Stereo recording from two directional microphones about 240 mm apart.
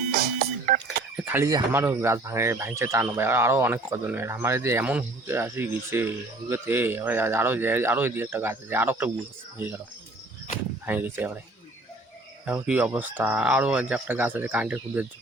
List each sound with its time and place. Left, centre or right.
0.6 s a sound: right
1.1 s speech: centre
10.8 s speech: centre
12.5 s speech: centre